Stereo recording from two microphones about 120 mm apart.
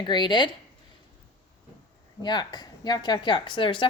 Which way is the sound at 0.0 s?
40° left (ahead or behind).